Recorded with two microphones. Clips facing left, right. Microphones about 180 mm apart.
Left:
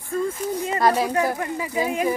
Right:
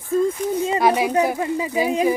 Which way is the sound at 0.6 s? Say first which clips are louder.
Right 5 dB; 25° right (ahead or behind).